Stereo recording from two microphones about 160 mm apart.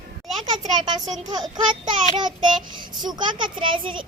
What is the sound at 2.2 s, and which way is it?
A child's voice, 25° right (ahead or behind).